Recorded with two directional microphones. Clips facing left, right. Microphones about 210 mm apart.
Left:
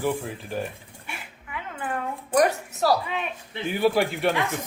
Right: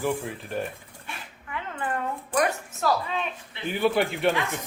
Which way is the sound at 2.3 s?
35° left (ahead or behind).